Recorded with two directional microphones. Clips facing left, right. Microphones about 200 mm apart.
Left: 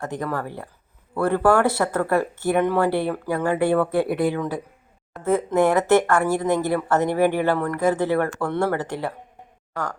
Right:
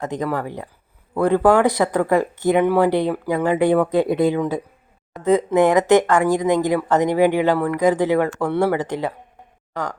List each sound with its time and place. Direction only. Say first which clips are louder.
0.0 s speech: right 4 dB; 20° right (ahead or behind)